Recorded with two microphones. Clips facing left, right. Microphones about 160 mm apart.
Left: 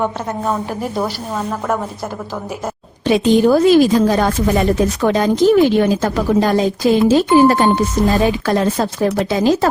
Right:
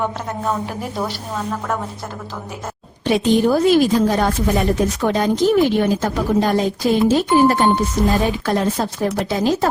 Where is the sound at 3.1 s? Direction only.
90° left.